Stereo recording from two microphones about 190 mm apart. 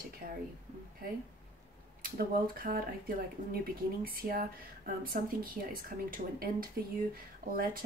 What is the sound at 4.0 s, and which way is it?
Speech, 50° right (ahead or behind).